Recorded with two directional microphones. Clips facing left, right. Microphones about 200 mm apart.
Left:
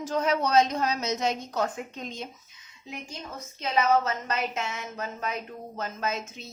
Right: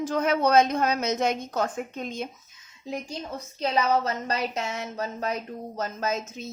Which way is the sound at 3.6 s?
35° right (ahead or behind).